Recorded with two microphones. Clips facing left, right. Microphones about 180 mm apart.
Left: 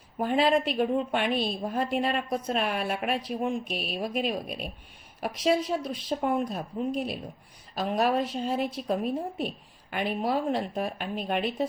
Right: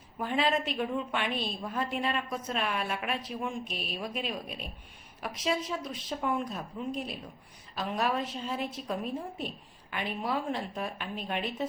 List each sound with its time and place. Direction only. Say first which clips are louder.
0.2 s a woman's voice: left 5 dB; 35° left (ahead or behind)